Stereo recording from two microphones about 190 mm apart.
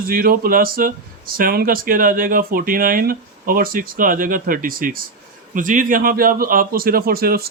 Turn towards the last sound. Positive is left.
turn(degrees=-50)  # may be behind; listen again after turning